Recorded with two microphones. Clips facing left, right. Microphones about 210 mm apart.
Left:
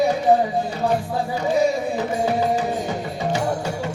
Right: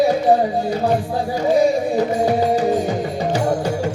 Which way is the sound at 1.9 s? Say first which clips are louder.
Right 4 dB; 35° right (ahead or behind).